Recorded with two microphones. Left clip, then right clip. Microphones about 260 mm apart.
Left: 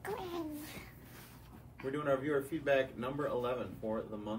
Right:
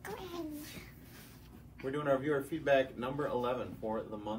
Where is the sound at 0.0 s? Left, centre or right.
Left.